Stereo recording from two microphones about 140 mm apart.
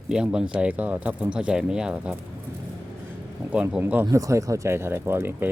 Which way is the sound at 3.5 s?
10° right (ahead or behind).